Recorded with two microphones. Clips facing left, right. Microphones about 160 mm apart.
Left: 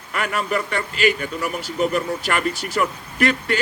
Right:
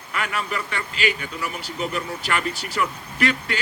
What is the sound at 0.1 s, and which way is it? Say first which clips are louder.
A man's voice: left 4 dB; 45° left (ahead or behind).